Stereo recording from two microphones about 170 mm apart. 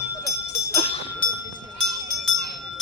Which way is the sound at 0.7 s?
35° left (ahead or behind).